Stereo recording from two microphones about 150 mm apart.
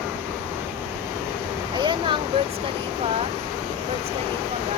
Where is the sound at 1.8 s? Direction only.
30° right (ahead or behind).